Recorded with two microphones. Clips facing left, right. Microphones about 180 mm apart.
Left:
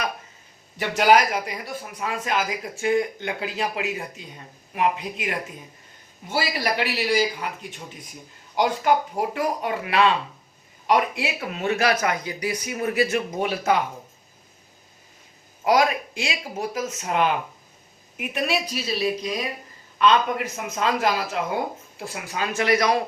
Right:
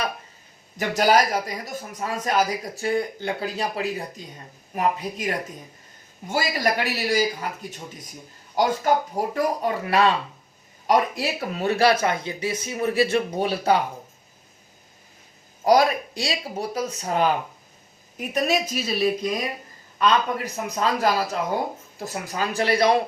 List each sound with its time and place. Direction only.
0.8 s a man's voice: 40° right (ahead or behind)
15.6 s a man's voice: 40° right (ahead or behind)